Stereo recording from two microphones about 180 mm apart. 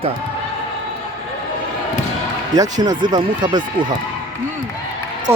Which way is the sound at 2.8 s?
25° right (ahead or behind).